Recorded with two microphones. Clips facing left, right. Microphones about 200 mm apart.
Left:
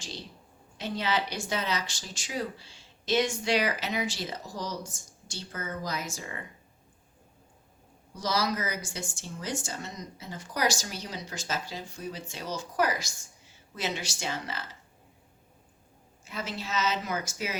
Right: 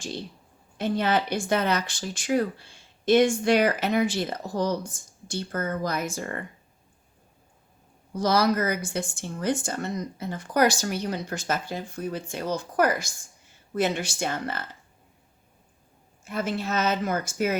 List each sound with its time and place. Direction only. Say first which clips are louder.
0.8 s speech: right 6 dB; 55° right (ahead or behind)
8.1 s a woman's voice: right 7 dB; 55° right (ahead or behind)
16.2 s a woman's voice: right 8 dB; 55° right (ahead or behind)